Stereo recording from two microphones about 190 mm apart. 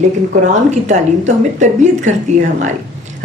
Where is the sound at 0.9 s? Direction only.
40° right (ahead or behind).